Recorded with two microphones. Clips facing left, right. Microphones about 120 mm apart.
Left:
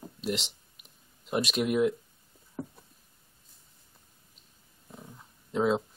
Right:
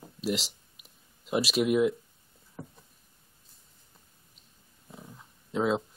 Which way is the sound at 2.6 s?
20° left (ahead or behind).